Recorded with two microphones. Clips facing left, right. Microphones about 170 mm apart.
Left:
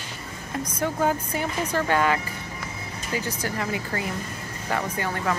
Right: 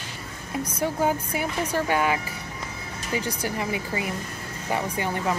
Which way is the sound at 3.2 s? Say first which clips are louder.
Even; 15° right (ahead or behind).